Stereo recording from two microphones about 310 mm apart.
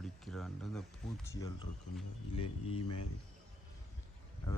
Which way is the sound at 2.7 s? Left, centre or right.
Left.